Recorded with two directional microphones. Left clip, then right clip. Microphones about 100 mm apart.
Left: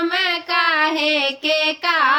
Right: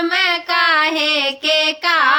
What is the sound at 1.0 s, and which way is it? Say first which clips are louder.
Female singing: right 2 dB; 10° left (ahead or behind).